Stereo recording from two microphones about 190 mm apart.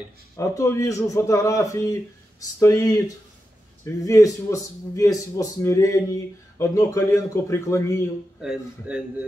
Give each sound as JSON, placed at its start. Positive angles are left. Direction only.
{"t": 0.4, "sound": "a man's voice", "side_deg": 15}
{"t": 8.4, "sound": "a man's voice", "side_deg": -5}